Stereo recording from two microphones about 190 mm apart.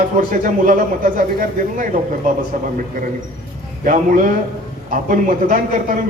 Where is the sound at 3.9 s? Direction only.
45° right (ahead or behind).